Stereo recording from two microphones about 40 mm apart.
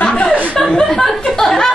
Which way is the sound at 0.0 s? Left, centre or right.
Left.